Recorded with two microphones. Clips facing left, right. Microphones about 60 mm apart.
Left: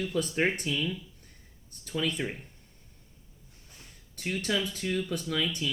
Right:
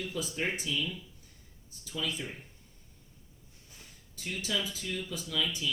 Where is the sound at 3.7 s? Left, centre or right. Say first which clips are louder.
Left 1 dB; left.